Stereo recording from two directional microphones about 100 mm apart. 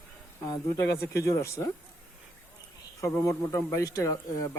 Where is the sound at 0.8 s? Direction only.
30° left (ahead or behind).